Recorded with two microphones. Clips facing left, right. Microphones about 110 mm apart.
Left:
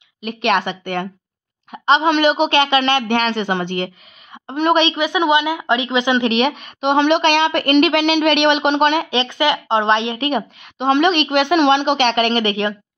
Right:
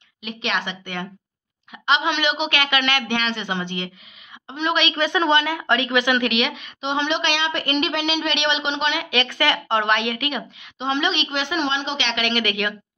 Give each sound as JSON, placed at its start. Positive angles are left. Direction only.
{"t": 0.2, "sound": "a woman's voice", "side_deg": 50}
{"t": 1.7, "sound": "a woman's voice", "side_deg": 40}
{"t": 3.1, "sound": "a woman's voice", "side_deg": 45}
{"t": 4.9, "sound": "a woman's voice", "side_deg": 15}
{"t": 9.1, "sound": "speech", "side_deg": 20}
{"t": 10.6, "sound": "a woman's voice", "side_deg": 55}